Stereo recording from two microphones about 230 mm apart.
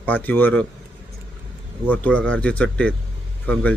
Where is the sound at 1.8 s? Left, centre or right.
Centre.